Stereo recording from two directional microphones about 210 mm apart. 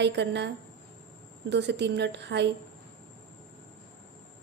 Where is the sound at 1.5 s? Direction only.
55° right (ahead or behind).